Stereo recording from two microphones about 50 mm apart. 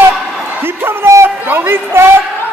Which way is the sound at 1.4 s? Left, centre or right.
Right.